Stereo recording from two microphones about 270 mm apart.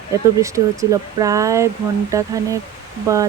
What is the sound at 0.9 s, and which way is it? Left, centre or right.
Speech, centre.